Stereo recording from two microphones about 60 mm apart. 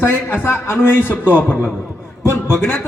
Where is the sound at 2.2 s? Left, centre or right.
Left.